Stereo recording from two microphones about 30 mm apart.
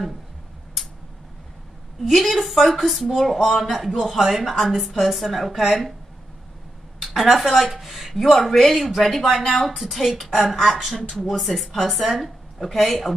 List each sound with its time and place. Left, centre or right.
0.8 s tick-tock: centre
2.0 s a woman's voice: centre
3.3 s a man's voice: centre
4.3 s a woman's voice: centre
7.0 s a woman's voice: centre
8.1 s a woman's voice: centre
11.3 s a woman's voice: centre